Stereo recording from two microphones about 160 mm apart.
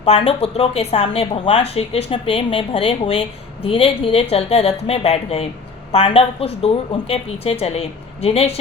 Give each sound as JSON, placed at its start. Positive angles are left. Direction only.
{"t": 0.0, "sound": "speech", "side_deg": 35}